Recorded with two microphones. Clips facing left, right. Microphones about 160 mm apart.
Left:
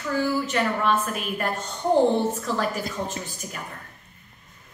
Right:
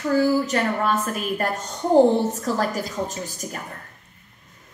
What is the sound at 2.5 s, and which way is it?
Speech, 40° right (ahead or behind).